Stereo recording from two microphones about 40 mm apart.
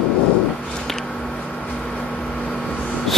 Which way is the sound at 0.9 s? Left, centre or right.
Centre.